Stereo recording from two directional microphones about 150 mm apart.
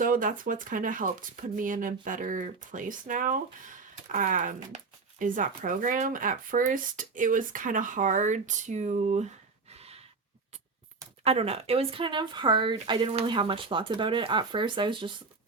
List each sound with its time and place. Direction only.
0.0 s speech: 65° right (ahead or behind); by 10.0 s 45° right (ahead or behind)
11.2 s speech: 45° right (ahead or behind)